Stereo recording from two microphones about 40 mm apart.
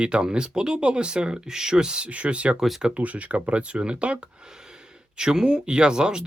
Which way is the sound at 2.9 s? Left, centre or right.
Right.